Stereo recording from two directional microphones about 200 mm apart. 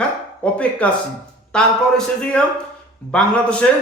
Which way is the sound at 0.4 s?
5° left (ahead or behind).